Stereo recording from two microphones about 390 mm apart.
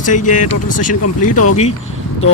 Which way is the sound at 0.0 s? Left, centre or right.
Centre.